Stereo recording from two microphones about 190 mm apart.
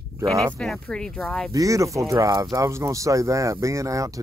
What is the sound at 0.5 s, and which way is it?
Speech, 5° left (ahead or behind).